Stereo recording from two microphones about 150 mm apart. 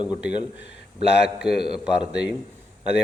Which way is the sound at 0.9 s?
90° left.